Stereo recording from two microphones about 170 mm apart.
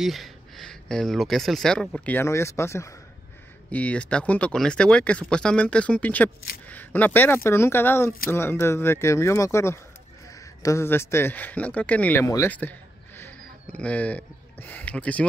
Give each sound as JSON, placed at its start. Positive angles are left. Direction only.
{"t": 0.0, "sound": "speech", "side_deg": 0}
{"t": 2.1, "sound": "speech", "side_deg": 15}